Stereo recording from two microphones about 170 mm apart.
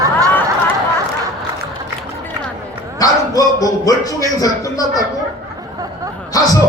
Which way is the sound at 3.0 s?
20° left (ahead or behind).